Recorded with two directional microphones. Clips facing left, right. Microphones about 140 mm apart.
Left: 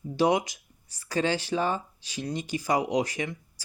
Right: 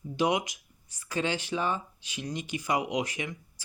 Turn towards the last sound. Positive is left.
turn(degrees=35)  # may be behind; listen again after turning